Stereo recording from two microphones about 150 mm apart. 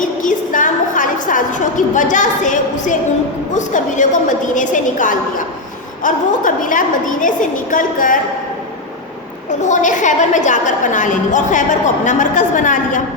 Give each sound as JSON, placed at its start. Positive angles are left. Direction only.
{"t": 0.0, "sound": "a sound", "side_deg": 60}
{"t": 3.5, "sound": "a woman's voice", "side_deg": 55}
{"t": 9.6, "sound": "a woman's voice", "side_deg": 55}